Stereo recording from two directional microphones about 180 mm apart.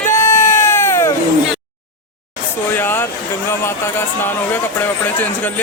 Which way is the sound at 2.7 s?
10° left (ahead or behind).